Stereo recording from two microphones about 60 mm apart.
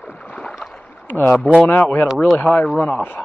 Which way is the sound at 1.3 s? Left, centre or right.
Centre.